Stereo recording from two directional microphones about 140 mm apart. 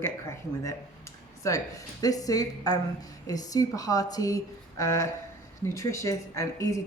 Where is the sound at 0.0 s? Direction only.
20° left (ahead or behind).